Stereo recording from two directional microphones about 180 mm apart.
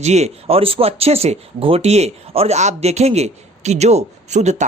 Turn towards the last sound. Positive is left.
turn(degrees=-40)  # may be behind; listen again after turning